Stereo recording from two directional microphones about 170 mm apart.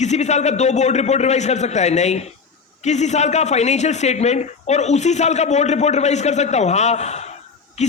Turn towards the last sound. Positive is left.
turn(degrees=40)  # may be behind; listen again after turning